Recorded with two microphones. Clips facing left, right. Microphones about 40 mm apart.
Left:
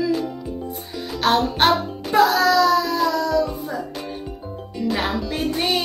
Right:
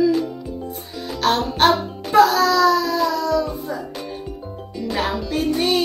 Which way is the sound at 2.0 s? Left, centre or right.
Centre.